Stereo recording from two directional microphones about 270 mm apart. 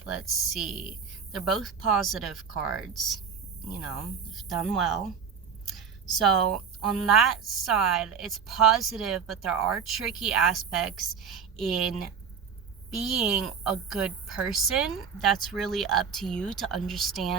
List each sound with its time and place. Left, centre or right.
0.0 s speech: centre
4.4 s speech: centre